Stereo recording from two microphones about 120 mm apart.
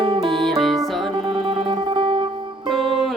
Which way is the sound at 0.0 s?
45° right (ahead or behind).